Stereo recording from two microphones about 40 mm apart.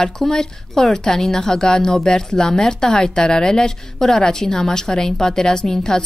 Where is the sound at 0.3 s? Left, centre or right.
Centre.